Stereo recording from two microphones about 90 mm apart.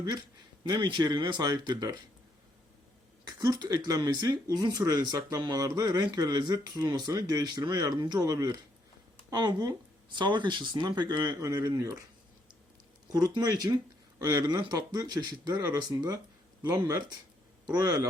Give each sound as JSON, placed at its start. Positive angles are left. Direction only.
{"t": 0.7, "sound": "speech", "side_deg": -50}
{"t": 3.2, "sound": "speech", "side_deg": -45}
{"t": 8.2, "sound": "speech", "side_deg": -40}
{"t": 11.3, "sound": "speech", "side_deg": -40}
{"t": 13.1, "sound": "speech", "side_deg": -45}
{"t": 16.6, "sound": "speech", "side_deg": -35}